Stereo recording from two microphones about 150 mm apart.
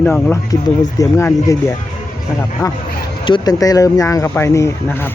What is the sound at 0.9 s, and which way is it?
Speech, 20° left (ahead or behind).